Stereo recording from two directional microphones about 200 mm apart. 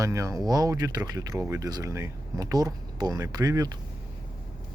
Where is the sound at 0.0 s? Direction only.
15° right (ahead or behind).